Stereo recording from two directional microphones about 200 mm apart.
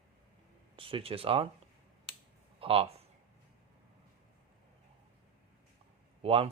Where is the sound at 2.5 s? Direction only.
30° right (ahead or behind).